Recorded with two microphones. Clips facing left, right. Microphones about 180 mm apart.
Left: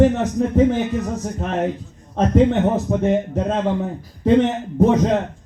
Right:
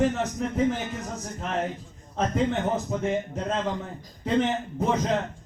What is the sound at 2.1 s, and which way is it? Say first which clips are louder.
A man's voice: left 9 dB; 60° left (ahead or behind).